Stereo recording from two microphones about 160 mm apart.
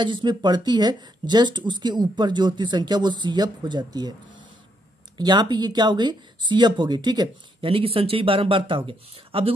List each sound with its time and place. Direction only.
0.0 s speech: 30° right (ahead or behind)
5.1 s speech: 25° right (ahead or behind)